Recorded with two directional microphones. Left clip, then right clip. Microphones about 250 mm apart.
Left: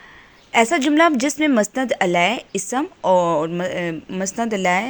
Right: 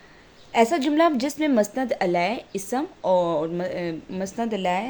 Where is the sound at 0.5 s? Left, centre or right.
Left.